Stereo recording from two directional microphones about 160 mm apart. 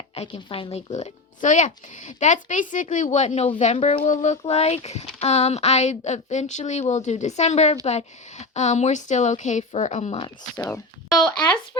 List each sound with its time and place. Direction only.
0.1 s speech: 35° left (ahead or behind)
0.9 s speech: 50° left (ahead or behind)
10.6 s speech: 10° left (ahead or behind)
11.2 s speech: 25° left (ahead or behind)